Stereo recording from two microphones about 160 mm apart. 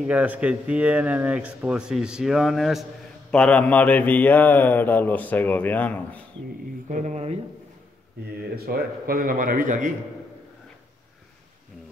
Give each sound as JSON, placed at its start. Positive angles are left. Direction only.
{"t": 0.0, "sound": "speech", "side_deg": -10}
{"t": 3.3, "sound": "mantra", "side_deg": 5}
{"t": 6.9, "sound": "speech", "side_deg": -50}
{"t": 8.5, "sound": "a man's voice", "side_deg": -75}